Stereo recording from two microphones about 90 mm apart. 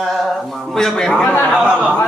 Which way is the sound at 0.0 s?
Centre (ahead or behind).